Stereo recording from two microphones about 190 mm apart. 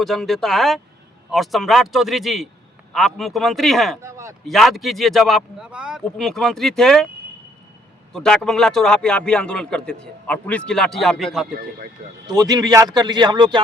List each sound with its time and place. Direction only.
0.0 s speech: centre (ahead or behind)
4.0 s speech: 15° right (ahead or behind)
4.4 s speech: centre (ahead or behind)
8.1 s speech: 5° left (ahead or behind)
12.3 s a man's voice: 20° right (ahead or behind)